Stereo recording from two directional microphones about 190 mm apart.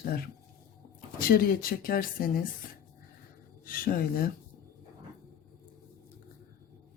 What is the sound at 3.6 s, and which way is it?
Speech, 50° left (ahead or behind).